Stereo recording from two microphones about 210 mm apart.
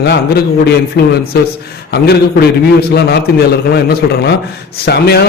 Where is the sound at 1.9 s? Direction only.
50° left (ahead or behind).